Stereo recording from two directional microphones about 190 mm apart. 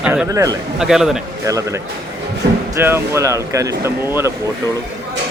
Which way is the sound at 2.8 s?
10° right (ahead or behind).